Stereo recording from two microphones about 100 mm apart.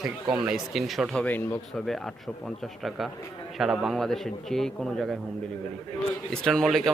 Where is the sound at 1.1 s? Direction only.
15° left (ahead or behind).